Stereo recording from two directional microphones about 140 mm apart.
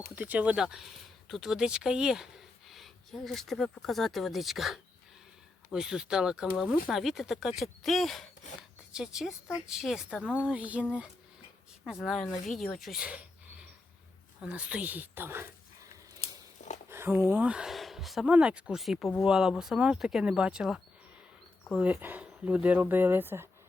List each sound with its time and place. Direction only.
0.2 s speech: 10° right (ahead or behind)
11.9 s speech: centre (ahead or behind)
14.4 s speech: 10° right (ahead or behind)
16.2 s a sound: 55° left (ahead or behind)
16.9 s speech: 20° right (ahead or behind)